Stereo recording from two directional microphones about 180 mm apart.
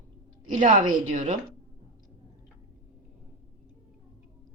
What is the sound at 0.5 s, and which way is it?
Speech, 50° right (ahead or behind).